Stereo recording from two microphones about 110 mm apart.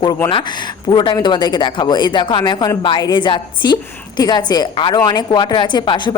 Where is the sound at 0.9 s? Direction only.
45° left (ahead or behind).